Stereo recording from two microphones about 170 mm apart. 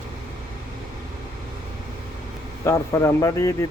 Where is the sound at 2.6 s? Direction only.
15° left (ahead or behind).